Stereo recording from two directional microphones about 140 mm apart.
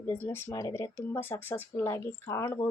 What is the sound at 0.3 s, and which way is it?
A woman's voice, 15° left (ahead or behind).